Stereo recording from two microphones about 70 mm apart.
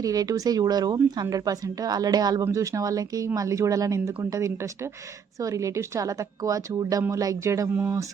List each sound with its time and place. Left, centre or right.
0.0 s a woman's voice: right
2.4 s a woman's voice: right